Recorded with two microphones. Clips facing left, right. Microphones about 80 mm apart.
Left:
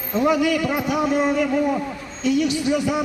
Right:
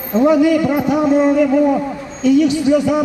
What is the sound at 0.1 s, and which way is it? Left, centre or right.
A man's voice, right.